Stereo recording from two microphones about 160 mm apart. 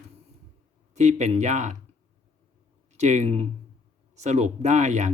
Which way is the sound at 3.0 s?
45° right (ahead or behind).